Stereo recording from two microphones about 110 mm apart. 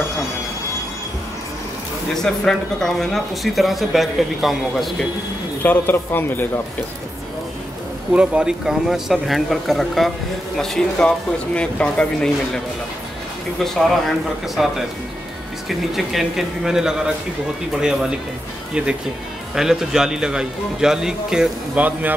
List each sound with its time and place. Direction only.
2.2 s speech: 5° left (ahead or behind)
5.6 s speech: 15° left (ahead or behind)
8.1 s speech: 10° right (ahead or behind); by 12.3 s 10° left (ahead or behind)
14.0 s speech: centre (ahead or behind)
16.1 s speech: centre (ahead or behind)
19.5 s speech: 5° right (ahead or behind)